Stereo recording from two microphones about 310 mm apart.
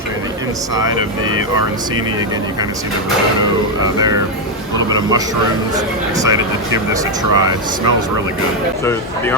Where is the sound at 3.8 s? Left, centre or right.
Centre.